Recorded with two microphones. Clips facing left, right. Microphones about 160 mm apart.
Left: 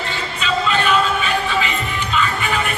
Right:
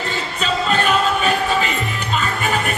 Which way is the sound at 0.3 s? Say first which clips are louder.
Even; 40° right (ahead or behind).